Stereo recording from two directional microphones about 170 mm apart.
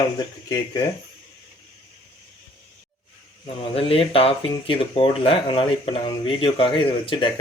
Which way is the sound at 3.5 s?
35° left (ahead or behind).